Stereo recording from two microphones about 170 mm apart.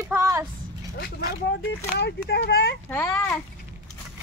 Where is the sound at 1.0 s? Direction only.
80° left.